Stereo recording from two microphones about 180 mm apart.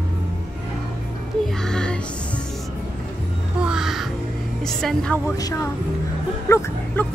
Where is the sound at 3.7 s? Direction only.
Centre (ahead or behind).